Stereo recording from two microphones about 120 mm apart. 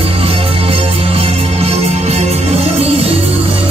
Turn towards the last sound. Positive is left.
turn(degrees=-55)  # may be behind; listen again after turning